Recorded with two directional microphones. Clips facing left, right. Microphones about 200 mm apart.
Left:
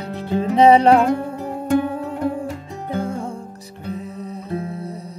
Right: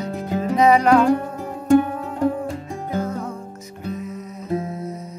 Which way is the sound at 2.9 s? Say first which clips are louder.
Left 1 dB; 30° left (ahead or behind).